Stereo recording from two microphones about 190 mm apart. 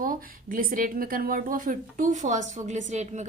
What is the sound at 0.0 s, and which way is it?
A woman's voice, 45° right (ahead or behind).